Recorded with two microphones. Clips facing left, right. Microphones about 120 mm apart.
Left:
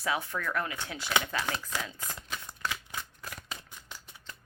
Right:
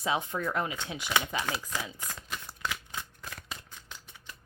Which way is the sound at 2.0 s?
10° left (ahead or behind).